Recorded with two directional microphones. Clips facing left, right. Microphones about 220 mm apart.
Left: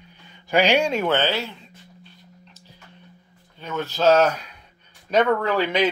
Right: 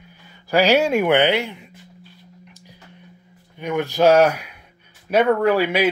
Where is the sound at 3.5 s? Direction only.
15° right (ahead or behind).